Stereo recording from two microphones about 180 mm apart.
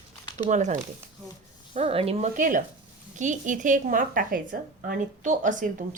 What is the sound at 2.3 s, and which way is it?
Speech, 45° right (ahead or behind).